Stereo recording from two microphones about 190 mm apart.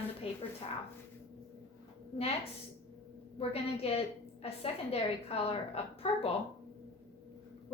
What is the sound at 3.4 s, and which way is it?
A woman's voice, 30° left (ahead or behind).